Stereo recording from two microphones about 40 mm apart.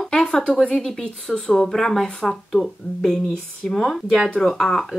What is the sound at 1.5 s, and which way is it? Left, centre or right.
Speech, centre.